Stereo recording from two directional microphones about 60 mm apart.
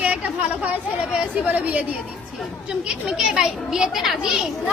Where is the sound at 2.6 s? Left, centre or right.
Centre.